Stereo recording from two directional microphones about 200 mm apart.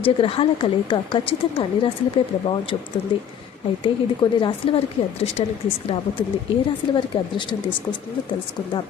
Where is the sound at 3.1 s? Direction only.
25° left (ahead or behind).